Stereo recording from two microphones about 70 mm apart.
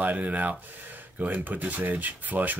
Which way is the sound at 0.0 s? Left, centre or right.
Right.